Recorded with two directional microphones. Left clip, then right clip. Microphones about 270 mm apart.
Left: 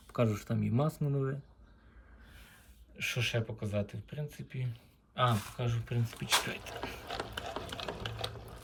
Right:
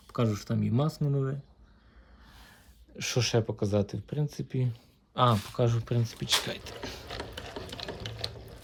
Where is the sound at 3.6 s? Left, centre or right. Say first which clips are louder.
Right 8 dB; centre.